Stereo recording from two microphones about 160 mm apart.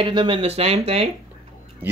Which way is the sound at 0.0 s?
35° right (ahead or behind).